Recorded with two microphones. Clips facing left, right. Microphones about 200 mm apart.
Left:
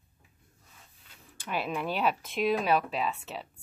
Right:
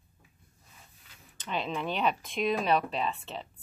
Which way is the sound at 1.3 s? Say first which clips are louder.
Left 1 dB; 10° left (ahead or behind).